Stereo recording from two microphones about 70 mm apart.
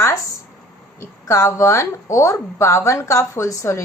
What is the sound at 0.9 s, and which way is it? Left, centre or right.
A woman's voice, left.